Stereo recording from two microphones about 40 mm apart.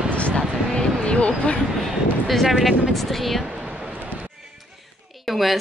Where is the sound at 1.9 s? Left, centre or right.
Centre.